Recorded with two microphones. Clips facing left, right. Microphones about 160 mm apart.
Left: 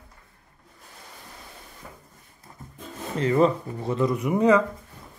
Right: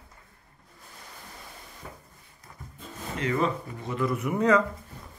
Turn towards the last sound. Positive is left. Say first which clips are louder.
# left 3 dB
turn(degrees=10)  # may be behind; listen again after turning